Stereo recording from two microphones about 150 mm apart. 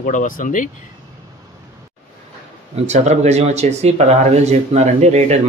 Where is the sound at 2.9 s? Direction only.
50° right (ahead or behind).